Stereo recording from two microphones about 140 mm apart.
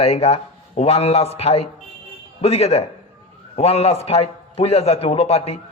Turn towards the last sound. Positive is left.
turn(degrees=50)  # may be behind; listen again after turning